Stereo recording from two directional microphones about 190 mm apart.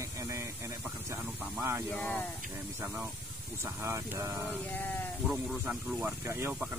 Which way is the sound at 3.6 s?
15° right (ahead or behind).